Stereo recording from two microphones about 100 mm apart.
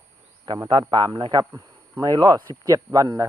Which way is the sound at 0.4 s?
50° right (ahead or behind).